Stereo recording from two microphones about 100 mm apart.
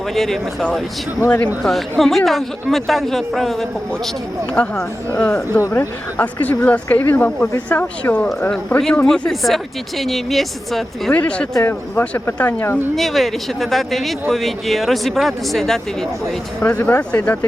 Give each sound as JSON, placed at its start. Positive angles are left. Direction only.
{"t": 0.1, "sound": "speech", "side_deg": 0}
{"t": 4.5, "sound": "speech", "side_deg": 10}
{"t": 5.5, "sound": "speech", "side_deg": 30}
{"t": 6.1, "sound": "speech", "side_deg": 15}
{"t": 11.1, "sound": "speech", "side_deg": 10}
{"t": 13.0, "sound": "speech", "side_deg": 0}